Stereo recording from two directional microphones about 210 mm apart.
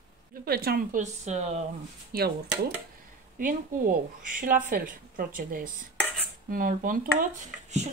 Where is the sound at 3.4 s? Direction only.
40° right (ahead or behind).